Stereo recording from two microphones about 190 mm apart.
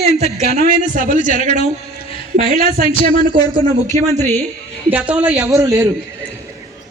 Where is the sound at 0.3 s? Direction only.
35° right (ahead or behind).